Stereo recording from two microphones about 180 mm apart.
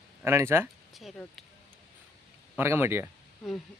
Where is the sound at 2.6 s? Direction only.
15° right (ahead or behind).